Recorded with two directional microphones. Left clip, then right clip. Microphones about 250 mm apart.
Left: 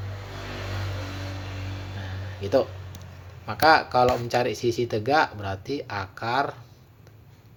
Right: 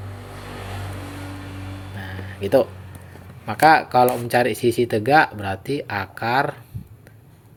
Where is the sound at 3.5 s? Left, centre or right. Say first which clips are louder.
Right 4 dB; right.